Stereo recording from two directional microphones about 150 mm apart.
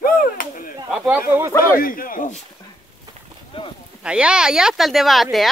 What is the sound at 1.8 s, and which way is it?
Speech, 70° left (ahead or behind).